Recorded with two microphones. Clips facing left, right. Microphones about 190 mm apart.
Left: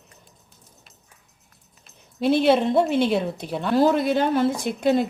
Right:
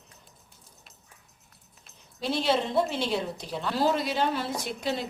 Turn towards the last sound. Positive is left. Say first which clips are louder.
# left 9 dB
turn(degrees=50)  # may be behind; listen again after turning